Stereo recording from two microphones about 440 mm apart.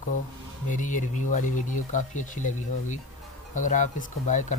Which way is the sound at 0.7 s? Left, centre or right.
Centre.